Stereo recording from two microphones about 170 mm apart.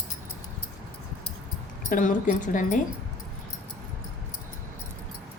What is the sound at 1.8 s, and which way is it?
Speech, 50° left (ahead or behind).